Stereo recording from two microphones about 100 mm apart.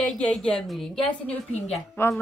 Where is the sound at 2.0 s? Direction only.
25° left (ahead or behind).